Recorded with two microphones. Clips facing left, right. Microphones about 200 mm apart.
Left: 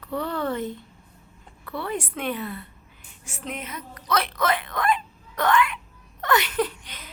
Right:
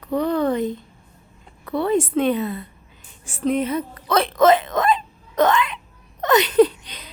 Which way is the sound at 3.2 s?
35° right (ahead or behind).